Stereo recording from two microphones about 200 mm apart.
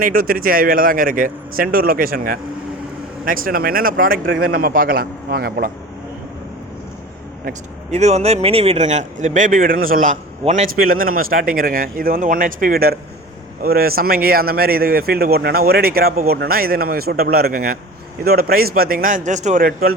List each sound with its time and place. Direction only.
0.0 s speech: 45° right (ahead or behind)
7.9 s speech: 35° right (ahead or behind)